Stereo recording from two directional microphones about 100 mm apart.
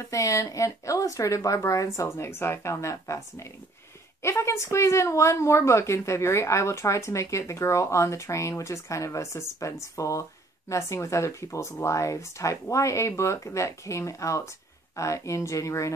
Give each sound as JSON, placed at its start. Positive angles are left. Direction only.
{"t": 0.0, "sound": "a woman's voice", "side_deg": 30}